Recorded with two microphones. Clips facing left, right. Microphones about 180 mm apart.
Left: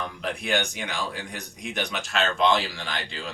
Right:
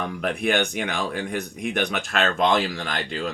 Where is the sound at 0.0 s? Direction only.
55° right (ahead or behind).